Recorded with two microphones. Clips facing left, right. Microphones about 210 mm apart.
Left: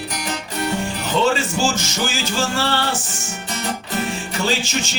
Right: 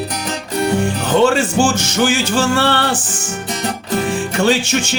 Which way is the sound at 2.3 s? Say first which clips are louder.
Right 6 dB; 60° right (ahead or behind).